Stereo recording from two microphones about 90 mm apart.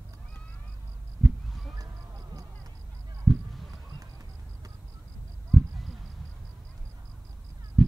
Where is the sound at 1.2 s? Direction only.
Centre (ahead or behind).